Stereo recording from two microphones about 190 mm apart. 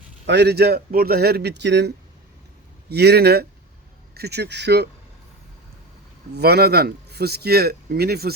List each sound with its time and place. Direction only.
0.3 s speech: 60° right (ahead or behind)
2.9 s speech: 60° right (ahead or behind)
6.3 s speech: 55° right (ahead or behind)